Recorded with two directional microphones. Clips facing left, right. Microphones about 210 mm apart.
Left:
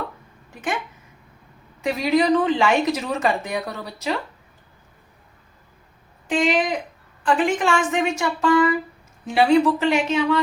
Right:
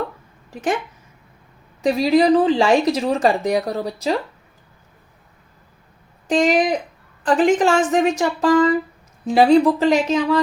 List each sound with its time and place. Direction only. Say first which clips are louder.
1.8 s speech: right 4 dB; 35° right (ahead or behind)
6.2 s speech: right 4 dB; 40° right (ahead or behind)